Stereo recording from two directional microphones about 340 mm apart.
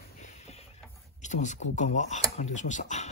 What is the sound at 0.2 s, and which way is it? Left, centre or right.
Printer, centre.